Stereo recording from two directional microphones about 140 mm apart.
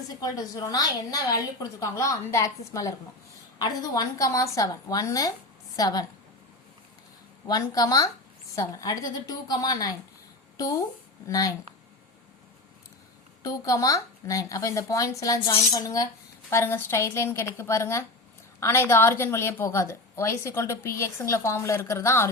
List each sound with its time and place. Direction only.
0.1 s a woman's voice: 25° left (ahead or behind)
7.4 s a woman's voice: 25° left (ahead or behind)
13.4 s a woman's voice: 25° left (ahead or behind)